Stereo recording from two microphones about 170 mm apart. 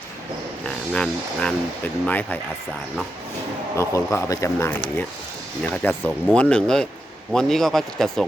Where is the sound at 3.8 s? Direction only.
15° left (ahead or behind).